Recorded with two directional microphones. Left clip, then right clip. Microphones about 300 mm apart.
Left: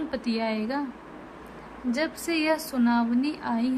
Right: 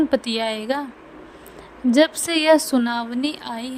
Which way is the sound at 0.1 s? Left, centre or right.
Right.